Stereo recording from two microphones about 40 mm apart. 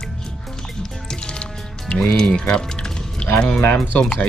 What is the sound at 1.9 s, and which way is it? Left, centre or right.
Speech, left.